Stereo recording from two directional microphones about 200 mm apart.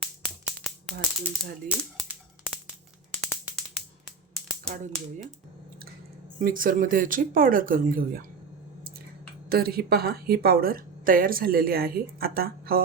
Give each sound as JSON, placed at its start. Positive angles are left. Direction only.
{"t": 1.6, "sound": "typewriter", "side_deg": -10}
{"t": 3.2, "sound": "a sound", "side_deg": 0}
{"t": 6.4, "sound": "a woman's voice", "side_deg": -45}
{"t": 9.5, "sound": "a woman's voice", "side_deg": -50}